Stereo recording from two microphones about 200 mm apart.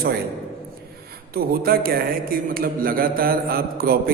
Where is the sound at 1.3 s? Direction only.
50° right (ahead or behind).